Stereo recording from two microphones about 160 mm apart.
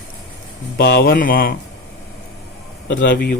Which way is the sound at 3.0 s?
65° left (ahead or behind).